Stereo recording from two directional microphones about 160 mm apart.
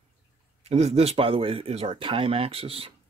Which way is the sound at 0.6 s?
40° right (ahead or behind).